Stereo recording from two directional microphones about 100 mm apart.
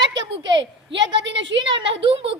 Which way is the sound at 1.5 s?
60° right (ahead or behind).